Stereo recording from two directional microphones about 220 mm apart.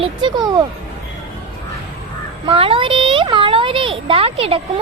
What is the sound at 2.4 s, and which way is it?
A child's voice, 25° right (ahead or behind).